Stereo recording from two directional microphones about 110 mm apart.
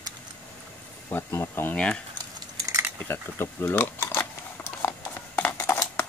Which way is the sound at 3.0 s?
20° left (ahead or behind).